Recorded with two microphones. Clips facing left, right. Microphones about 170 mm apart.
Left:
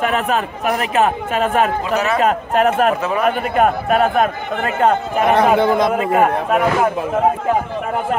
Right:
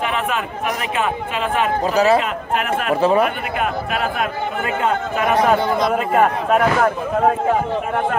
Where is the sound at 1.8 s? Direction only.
35° right (ahead or behind).